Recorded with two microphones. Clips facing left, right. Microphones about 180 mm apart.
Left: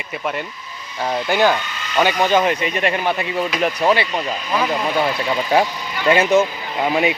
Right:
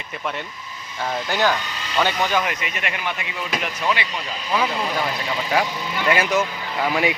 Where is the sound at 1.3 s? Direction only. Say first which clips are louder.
Left 6 dB; 15° left (ahead or behind).